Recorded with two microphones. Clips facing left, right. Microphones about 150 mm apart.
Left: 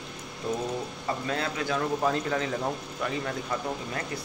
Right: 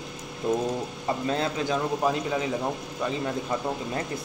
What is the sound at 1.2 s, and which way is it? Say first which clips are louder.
Speech: right 4 dB; 25° right (ahead or behind).